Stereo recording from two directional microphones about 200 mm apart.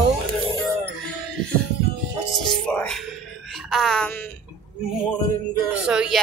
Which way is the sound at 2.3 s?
Centre (ahead or behind).